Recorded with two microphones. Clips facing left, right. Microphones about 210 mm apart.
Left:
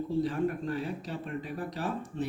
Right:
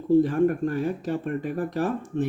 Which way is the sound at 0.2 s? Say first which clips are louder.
Right 9 dB; 50° right (ahead or behind).